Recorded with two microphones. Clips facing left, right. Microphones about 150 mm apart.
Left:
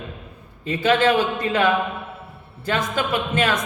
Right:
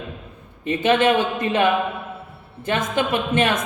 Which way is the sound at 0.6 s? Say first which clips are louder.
Right 1 dB; 20° right (ahead or behind).